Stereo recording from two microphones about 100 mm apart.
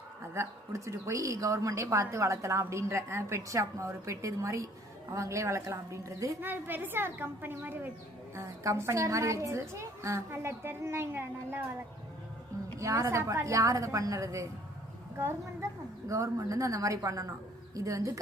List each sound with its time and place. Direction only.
0.3 s speech: 30° right (ahead or behind)
6.4 s a woman's voice: 20° right (ahead or behind)
12.8 s speech: 30° right (ahead or behind)
16.0 s speech: 30° right (ahead or behind)